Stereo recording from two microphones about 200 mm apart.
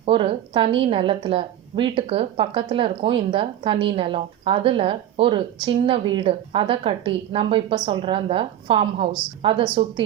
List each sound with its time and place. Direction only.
0.0 s a woman's voice: 30° right (ahead or behind)